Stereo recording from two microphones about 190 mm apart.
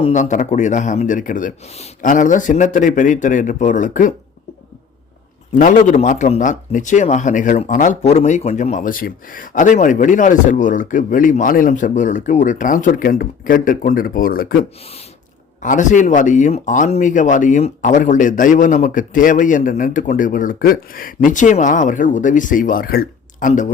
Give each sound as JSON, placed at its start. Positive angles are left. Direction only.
{"t": 0.0, "sound": "speech", "side_deg": 40}
{"t": 5.5, "sound": "speech", "side_deg": 45}
{"t": 15.6, "sound": "speech", "side_deg": 40}